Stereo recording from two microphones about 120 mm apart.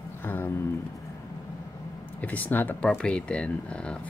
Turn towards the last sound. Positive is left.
turn(degrees=10)  # may be behind; listen again after turning